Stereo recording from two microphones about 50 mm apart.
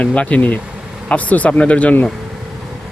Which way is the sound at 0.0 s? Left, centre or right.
Left.